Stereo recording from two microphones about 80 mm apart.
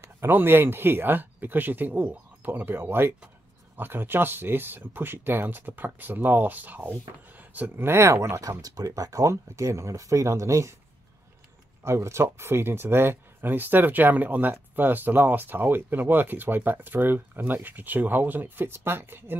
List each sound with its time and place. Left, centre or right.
0.0 s speech: right
11.8 s speech: right